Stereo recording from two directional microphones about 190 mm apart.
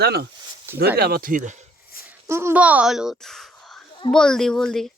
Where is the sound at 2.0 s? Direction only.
15° right (ahead or behind).